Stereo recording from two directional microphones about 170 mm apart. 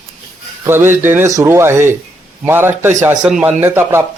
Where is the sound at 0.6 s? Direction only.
15° right (ahead or behind).